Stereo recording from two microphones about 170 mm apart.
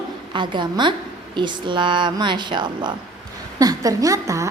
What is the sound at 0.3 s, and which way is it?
A woman's voice, 25° right (ahead or behind).